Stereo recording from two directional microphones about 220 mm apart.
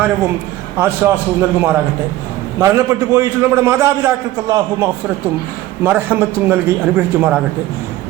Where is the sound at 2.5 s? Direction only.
15° right (ahead or behind).